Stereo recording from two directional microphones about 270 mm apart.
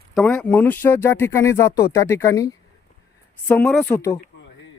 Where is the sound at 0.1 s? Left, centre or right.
Centre.